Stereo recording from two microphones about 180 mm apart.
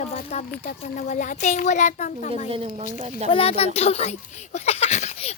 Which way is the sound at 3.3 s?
30° left (ahead or behind).